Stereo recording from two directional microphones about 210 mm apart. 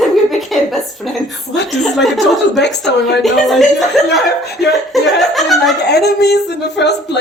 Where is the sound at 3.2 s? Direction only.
Centre (ahead or behind).